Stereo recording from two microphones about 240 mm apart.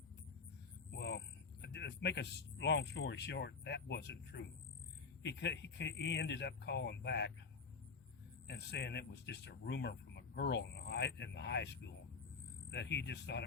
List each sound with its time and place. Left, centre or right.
0.9 s a sound: left
1.6 s speech: left
8.4 s speech: left
12.7 s speech: left